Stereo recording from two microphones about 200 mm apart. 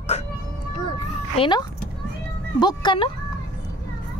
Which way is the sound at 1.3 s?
25° left (ahead or behind).